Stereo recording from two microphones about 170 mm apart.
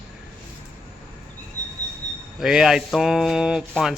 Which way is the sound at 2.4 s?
5° right (ahead or behind).